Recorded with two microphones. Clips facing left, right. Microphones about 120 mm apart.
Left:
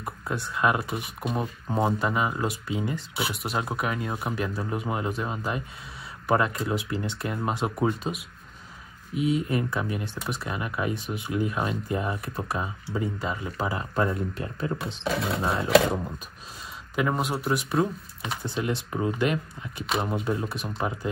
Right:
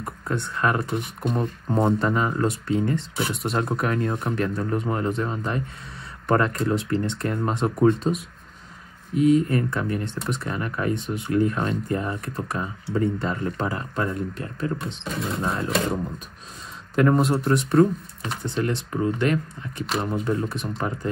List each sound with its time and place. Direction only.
0.0 s speech: 5° left (ahead or behind)
9.2 s speech: 10° left (ahead or behind)
14.8 s speech: centre (ahead or behind)
16.9 s speech: 5° left (ahead or behind)